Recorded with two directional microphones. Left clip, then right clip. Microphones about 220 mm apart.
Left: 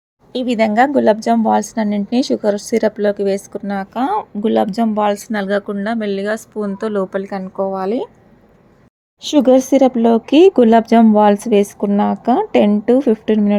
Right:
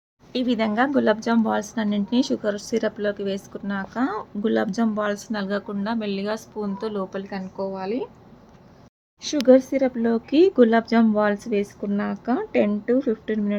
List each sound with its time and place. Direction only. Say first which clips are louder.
0.3 s a woman's voice: left 9 dB; 20° left (ahead or behind)
9.5 s speech: left 4 dB; 30° left (ahead or behind)